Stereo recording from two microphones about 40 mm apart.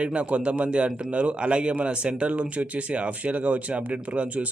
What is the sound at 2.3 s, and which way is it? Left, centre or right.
Speech, right.